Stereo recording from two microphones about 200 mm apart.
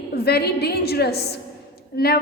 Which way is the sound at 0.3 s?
55° left (ahead or behind).